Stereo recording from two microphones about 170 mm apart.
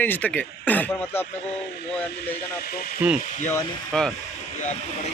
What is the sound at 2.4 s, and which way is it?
Speech, 65° left (ahead or behind).